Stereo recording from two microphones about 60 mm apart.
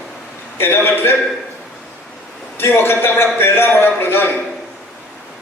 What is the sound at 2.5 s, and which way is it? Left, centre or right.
A man's voice, left.